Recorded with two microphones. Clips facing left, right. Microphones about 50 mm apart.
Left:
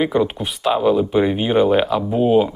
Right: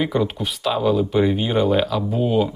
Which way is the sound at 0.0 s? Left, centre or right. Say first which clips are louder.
Left 3 dB; centre.